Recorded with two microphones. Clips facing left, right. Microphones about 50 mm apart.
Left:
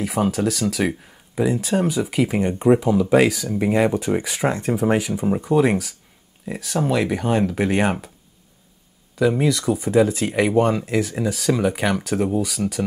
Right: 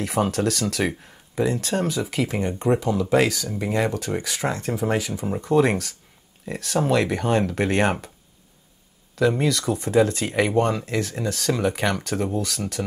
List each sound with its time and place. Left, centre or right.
0.0 s speech: centre
9.1 s speech: centre